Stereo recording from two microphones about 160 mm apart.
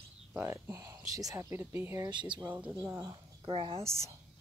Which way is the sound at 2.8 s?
20° right (ahead or behind).